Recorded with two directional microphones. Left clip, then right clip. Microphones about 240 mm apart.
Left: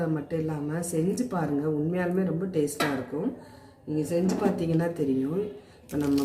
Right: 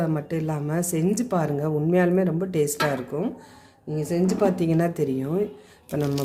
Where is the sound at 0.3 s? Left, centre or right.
Right.